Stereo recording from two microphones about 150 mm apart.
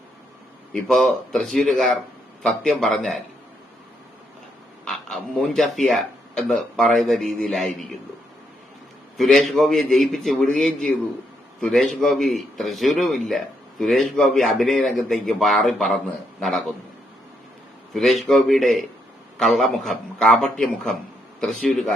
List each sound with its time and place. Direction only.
0.7 s a man's voice: 5° left (ahead or behind)
4.9 s speech: 5° left (ahead or behind)
9.1 s a man's voice: centre (ahead or behind)
17.9 s a man's voice: centre (ahead or behind)